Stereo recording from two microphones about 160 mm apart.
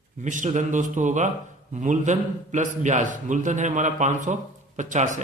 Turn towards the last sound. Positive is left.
turn(degrees=-50)  # may be behind; listen again after turning